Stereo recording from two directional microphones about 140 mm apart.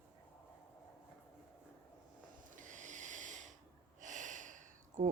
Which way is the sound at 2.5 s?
65° right (ahead or behind).